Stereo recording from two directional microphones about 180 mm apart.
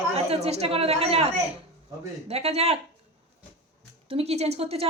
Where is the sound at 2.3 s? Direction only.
35° right (ahead or behind).